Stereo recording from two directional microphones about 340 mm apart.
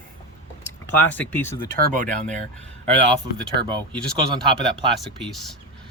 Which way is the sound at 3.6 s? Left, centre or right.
Centre.